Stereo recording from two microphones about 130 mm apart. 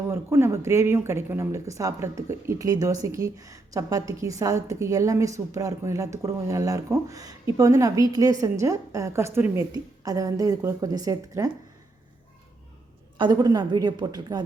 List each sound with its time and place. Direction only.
0.1 s speech: 20° right (ahead or behind)
13.1 s a woman's voice: 35° right (ahead or behind)